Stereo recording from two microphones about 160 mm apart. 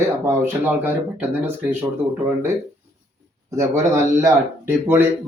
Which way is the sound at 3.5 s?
20° right (ahead or behind).